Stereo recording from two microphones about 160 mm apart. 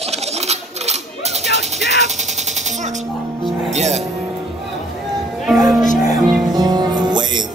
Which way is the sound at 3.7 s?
45° right (ahead or behind).